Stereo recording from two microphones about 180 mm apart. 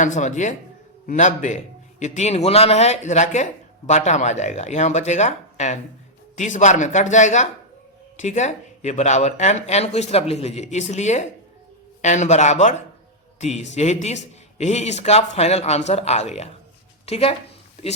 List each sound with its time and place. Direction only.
0.0 s speech: 45° left (ahead or behind)